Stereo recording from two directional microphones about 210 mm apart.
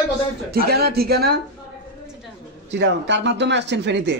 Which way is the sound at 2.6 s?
55° right (ahead or behind).